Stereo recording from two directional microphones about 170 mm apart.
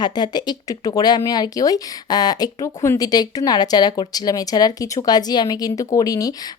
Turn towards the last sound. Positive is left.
turn(degrees=20)  # may be behind; listen again after turning